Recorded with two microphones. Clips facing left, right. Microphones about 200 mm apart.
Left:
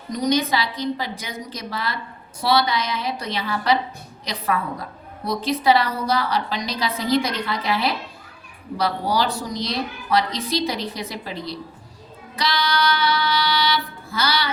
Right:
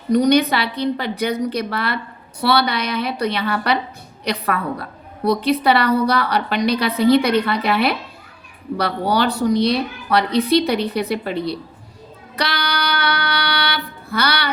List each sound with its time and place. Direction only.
0.1 s a woman's voice: 65° right (ahead or behind)
12.4 s child singing: 65° right (ahead or behind)